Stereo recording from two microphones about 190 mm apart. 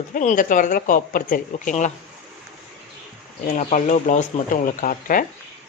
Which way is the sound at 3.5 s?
40° left (ahead or behind).